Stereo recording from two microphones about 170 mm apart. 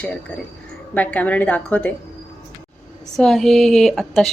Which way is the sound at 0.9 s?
10° left (ahead or behind).